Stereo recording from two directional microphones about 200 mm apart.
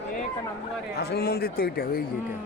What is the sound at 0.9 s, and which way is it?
A man's voice, 50° left (ahead or behind).